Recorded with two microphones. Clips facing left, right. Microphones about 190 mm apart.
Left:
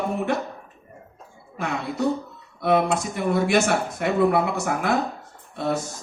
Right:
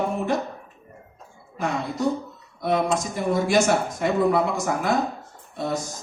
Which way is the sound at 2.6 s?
65° left (ahead or behind).